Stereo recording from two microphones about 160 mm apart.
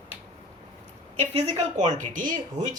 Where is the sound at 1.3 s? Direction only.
50° right (ahead or behind).